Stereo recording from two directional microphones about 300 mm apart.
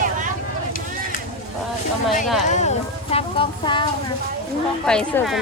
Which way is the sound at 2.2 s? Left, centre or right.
Centre.